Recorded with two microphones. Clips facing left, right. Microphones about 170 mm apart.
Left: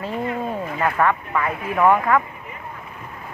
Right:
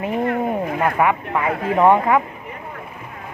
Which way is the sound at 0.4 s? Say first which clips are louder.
Right 4 dB; 15° right (ahead or behind).